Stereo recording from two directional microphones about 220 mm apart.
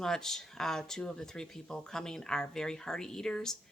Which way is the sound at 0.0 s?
Centre (ahead or behind).